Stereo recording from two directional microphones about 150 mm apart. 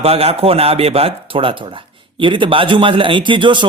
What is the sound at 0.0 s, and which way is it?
Speech, 40° right (ahead or behind).